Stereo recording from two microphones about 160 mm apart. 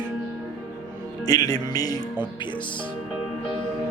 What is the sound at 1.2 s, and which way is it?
A man's voice, 25° left (ahead or behind).